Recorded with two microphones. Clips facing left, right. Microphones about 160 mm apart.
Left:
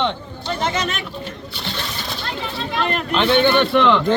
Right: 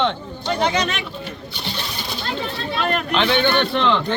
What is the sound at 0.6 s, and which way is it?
Speech, 5° left (ahead or behind).